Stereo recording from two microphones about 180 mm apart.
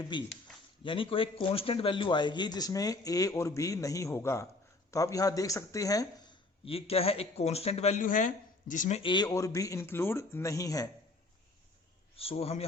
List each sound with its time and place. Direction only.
0.0 s speech: 25° left (ahead or behind); by 9.0 s 45° left (ahead or behind)
9.0 s speech: 25° left (ahead or behind)
12.1 s speech: 30° left (ahead or behind)